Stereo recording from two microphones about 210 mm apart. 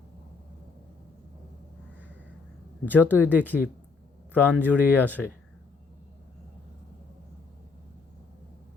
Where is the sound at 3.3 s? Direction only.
5° left (ahead or behind).